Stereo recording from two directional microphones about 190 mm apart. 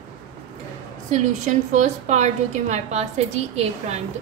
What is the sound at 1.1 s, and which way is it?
A woman's voice, 40° right (ahead or behind).